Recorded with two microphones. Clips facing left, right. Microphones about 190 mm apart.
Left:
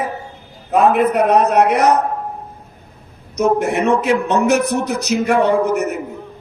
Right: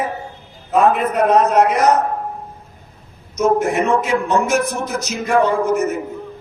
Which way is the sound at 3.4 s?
65° left (ahead or behind).